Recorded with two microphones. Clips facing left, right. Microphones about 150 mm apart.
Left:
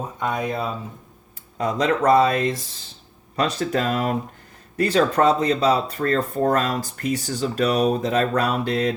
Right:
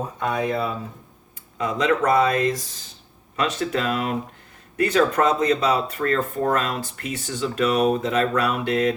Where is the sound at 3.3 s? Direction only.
35° left (ahead or behind).